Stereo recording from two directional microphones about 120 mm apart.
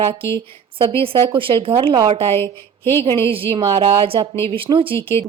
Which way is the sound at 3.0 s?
50° right (ahead or behind).